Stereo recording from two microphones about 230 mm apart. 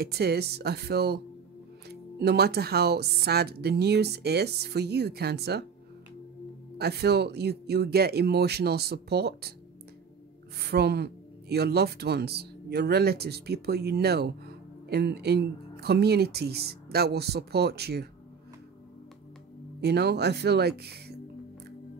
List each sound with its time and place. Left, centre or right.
0.0 s speech: right
6.8 s speech: right
10.6 s speech: right
19.8 s speech: right